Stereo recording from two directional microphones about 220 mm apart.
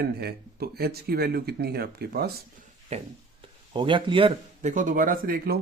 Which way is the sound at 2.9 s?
30° right (ahead or behind).